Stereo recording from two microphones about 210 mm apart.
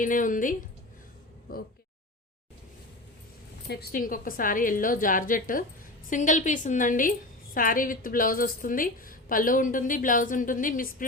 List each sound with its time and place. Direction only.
0.0 s a woman's voice: 40° left (ahead or behind)
3.7 s a woman's voice: 45° left (ahead or behind)